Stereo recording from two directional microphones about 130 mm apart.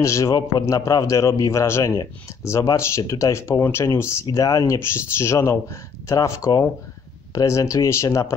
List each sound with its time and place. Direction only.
0.0 s speech: 25° left (ahead or behind)